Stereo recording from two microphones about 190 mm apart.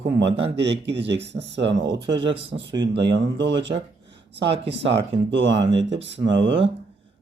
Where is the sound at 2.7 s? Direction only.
25° right (ahead or behind).